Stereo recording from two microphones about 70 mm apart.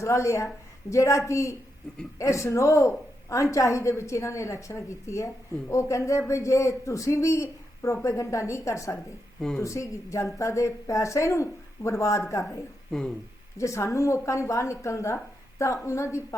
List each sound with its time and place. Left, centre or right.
0.0 s a woman's voice: left
12.9 s speech: centre
13.6 s a woman's voice: left